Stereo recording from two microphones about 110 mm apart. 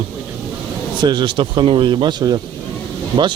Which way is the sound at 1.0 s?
45° right (ahead or behind).